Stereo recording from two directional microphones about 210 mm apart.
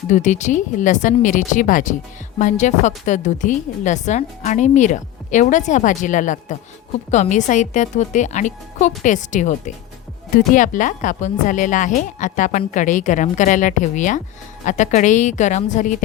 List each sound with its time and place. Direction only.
0.1 s a woman's voice: 35° left (ahead or behind)